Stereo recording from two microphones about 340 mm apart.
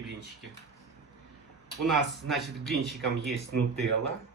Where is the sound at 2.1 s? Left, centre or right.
Centre.